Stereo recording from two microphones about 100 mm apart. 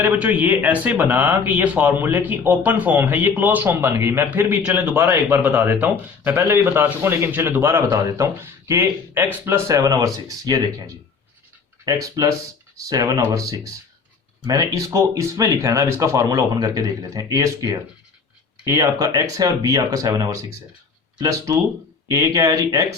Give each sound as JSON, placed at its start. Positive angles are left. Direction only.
{"t": 0.0, "sound": "speech", "side_deg": -15}
{"t": 4.9, "sound": "a man's voice", "side_deg": -25}
{"t": 5.4, "sound": "a man's voice", "side_deg": -15}